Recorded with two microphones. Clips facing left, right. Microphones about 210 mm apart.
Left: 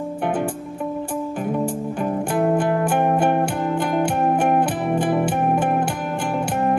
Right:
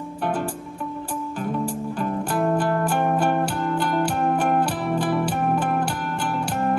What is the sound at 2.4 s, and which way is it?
Music, 15° left (ahead or behind).